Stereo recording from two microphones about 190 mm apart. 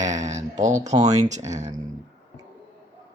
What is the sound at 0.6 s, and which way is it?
Speech, 40° right (ahead or behind).